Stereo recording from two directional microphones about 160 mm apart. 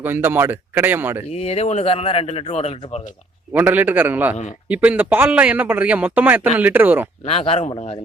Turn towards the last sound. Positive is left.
turn(degrees=40)  # may be behind; listen again after turning